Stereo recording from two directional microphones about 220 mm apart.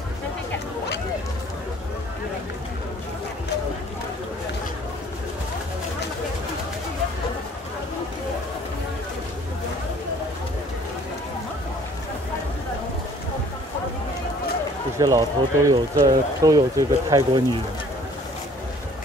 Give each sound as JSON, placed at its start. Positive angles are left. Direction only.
{"t": 15.0, "sound": "speech", "side_deg": -15}